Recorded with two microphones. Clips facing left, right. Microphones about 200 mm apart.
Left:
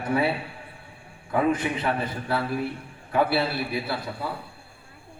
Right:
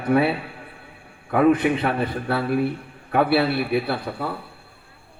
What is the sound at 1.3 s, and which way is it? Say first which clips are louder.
A man's voice: right 6 dB; 60° right (ahead or behind).